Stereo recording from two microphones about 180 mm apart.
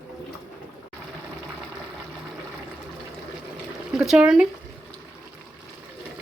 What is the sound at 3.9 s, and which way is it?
Speech, 5° right (ahead or behind).